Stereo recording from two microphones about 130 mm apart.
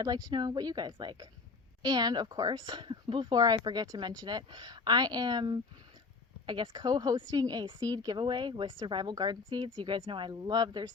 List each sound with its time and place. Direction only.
0.0 s a woman's voice: 30° right (ahead or behind)